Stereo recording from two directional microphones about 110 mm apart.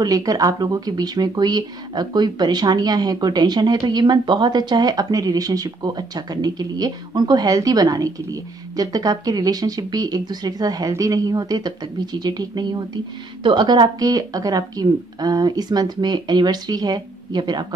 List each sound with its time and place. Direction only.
0.0 s speech: 35° right (ahead or behind)